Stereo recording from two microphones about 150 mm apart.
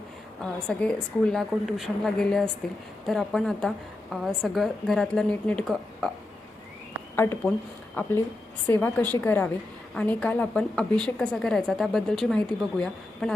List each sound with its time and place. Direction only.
0.7 s a woman's voice: 5° left (ahead or behind)
8.0 s a woman's voice: 15° left (ahead or behind)